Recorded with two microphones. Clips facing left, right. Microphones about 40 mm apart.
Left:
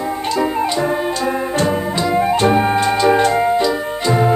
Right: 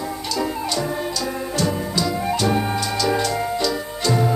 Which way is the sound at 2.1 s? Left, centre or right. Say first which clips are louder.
Left 9 dB; left.